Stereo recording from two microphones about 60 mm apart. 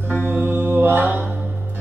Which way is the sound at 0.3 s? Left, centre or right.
Right.